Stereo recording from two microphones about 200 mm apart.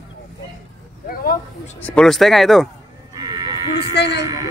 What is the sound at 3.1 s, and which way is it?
Livestock, 20° right (ahead or behind).